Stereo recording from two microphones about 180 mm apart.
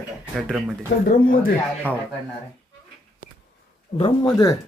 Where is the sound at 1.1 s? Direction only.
50° left (ahead or behind).